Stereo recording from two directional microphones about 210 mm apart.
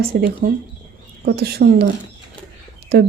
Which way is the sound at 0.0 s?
45° right (ahead or behind).